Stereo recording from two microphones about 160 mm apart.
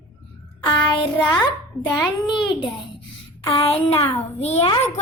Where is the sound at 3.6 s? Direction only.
40° left (ahead or behind).